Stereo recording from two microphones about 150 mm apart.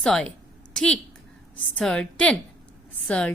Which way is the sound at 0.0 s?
5° left (ahead or behind).